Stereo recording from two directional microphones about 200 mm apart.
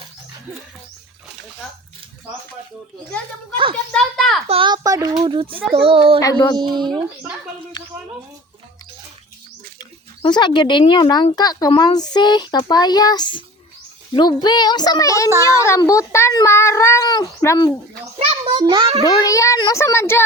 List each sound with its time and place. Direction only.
3.9 s a child's voice: centre (ahead or behind)
4.4 s a child's voice: 25° right (ahead or behind)
10.2 s a child's voice: 25° left (ahead or behind)
18.2 s a child's voice: 30° right (ahead or behind)
19.0 s a child's voice: 15° left (ahead or behind)